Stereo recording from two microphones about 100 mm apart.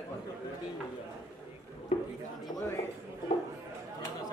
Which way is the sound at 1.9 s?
90° left.